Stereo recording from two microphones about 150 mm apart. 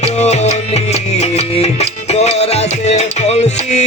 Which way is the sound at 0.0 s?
45° left (ahead or behind).